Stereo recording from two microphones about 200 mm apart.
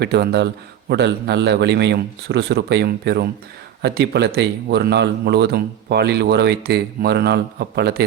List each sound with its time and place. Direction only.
0.0 s a man's voice: 55° right (ahead or behind)